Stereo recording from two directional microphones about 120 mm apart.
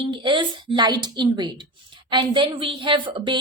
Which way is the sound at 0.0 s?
40° right (ahead or behind).